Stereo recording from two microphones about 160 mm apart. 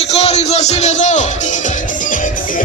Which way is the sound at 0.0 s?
40° left (ahead or behind).